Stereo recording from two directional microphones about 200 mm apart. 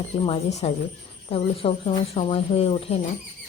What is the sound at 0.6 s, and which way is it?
Speech, 30° left (ahead or behind).